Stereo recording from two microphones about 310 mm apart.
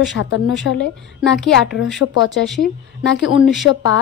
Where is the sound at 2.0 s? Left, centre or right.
Left.